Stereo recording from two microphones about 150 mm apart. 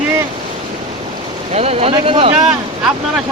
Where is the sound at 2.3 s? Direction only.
5° right (ahead or behind).